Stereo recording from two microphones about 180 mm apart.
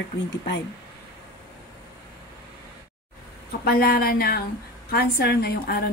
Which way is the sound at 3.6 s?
55° left (ahead or behind).